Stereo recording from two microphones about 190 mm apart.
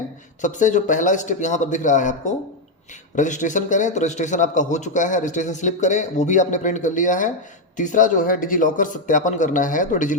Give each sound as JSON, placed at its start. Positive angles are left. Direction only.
{"t": 0.4, "sound": "a man's voice", "side_deg": 40}